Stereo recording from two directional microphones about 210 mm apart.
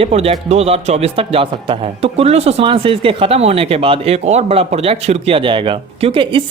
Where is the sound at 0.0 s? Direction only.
30° right (ahead or behind).